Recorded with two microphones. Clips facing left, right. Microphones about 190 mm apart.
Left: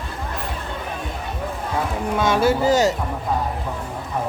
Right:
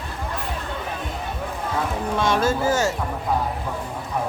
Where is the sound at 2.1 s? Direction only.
5° left (ahead or behind).